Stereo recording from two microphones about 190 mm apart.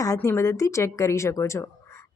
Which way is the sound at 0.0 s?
15° left (ahead or behind).